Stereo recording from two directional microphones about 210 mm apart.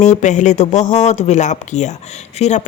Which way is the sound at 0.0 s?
35° left (ahead or behind).